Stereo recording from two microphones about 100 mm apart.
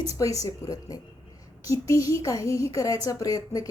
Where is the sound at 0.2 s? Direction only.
35° left (ahead or behind).